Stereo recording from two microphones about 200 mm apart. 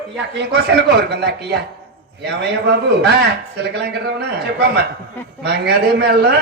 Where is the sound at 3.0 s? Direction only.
60° right (ahead or behind).